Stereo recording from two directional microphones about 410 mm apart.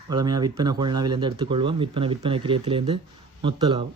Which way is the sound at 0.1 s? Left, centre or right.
Centre.